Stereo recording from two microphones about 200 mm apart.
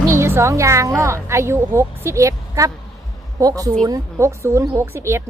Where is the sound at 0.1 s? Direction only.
15° right (ahead or behind).